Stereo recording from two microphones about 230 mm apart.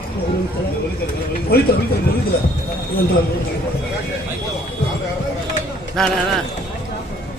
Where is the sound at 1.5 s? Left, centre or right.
Left.